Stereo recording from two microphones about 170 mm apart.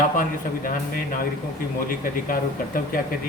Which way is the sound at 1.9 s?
55° left (ahead or behind).